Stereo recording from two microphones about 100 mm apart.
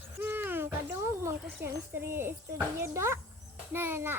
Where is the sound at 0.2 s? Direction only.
20° right (ahead or behind).